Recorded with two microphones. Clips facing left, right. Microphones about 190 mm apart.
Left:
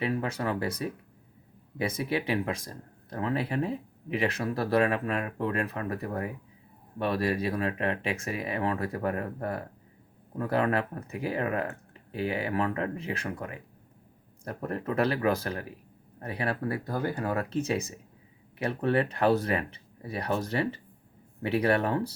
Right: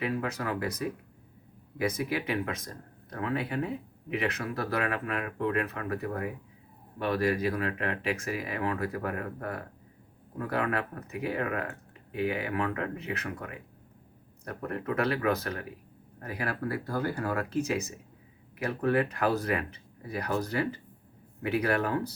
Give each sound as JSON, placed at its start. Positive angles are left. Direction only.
{"t": 0.0, "sound": "speech", "side_deg": 30}